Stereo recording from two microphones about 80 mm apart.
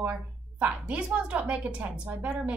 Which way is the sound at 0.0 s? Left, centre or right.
Centre.